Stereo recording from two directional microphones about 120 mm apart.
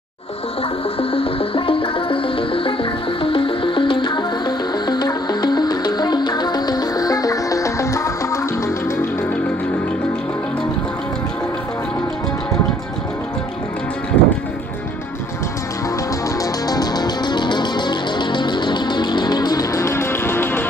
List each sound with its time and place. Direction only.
0.9 s music: 50° left (ahead or behind); by 8.4 s 25° left (ahead or behind)
14.2 s music: 10° left (ahead or behind)
16.3 s music: 30° left (ahead or behind)